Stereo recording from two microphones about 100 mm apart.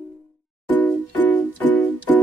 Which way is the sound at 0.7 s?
15° left (ahead or behind).